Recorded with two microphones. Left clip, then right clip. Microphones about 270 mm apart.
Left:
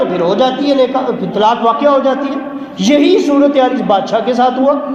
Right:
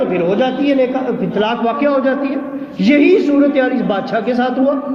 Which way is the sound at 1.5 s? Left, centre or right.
Centre.